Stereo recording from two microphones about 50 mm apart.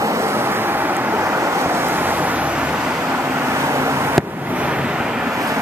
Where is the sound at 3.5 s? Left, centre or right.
Right.